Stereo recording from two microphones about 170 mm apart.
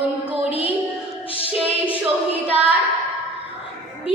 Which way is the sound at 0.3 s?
10° right (ahead or behind).